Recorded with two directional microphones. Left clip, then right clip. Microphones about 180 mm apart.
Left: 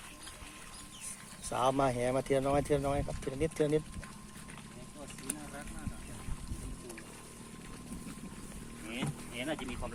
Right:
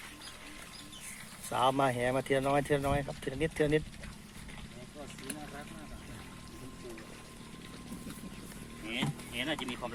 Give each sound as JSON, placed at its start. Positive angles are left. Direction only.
{"t": 1.5, "sound": "speech", "side_deg": 0}
{"t": 8.9, "sound": "music", "side_deg": -65}